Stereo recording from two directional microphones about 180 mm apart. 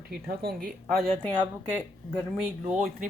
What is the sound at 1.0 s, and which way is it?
Speech, 5° left (ahead or behind).